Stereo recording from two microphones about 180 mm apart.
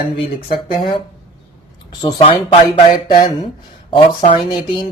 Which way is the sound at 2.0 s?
30° left (ahead or behind).